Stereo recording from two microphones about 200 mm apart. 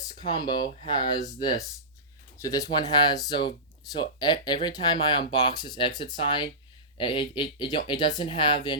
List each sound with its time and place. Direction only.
0.2 s speech: 20° left (ahead or behind)
2.4 s speech: 15° left (ahead or behind)